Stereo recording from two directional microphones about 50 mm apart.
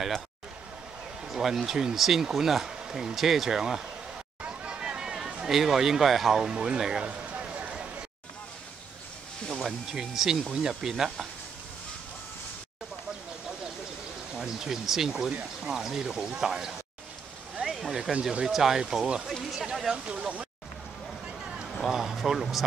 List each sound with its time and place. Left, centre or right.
1.2 s speech: centre
4.4 s hubbub: centre
5.3 s speech: centre
6.4 s speech: centre
7.1 s a sound: right
9.5 s speech: centre
14.3 s speech: centre
17.7 s speech: centre
19.4 s a sound: centre
20.1 s speech: right
21.8 s speech: centre